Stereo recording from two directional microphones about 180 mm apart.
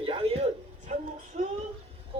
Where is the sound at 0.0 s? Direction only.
30° right (ahead or behind).